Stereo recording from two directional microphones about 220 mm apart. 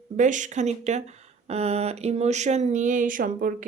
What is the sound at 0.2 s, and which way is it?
Speech, 35° right (ahead or behind).